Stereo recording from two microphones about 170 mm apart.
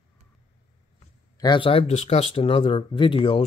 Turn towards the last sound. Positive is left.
turn(degrees=30)  # may be behind; listen again after turning